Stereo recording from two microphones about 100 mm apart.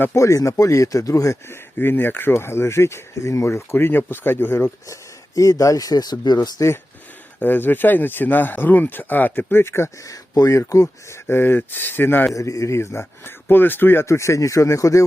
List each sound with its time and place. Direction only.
0.0 s speech: 30° left (ahead or behind)
5.3 s speech: 35° left (ahead or behind)
7.3 s speech: 20° left (ahead or behind)
12.3 s speech: 35° left (ahead or behind)